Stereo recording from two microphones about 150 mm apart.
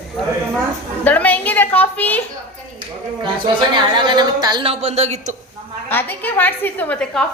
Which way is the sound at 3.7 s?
30° right (ahead or behind).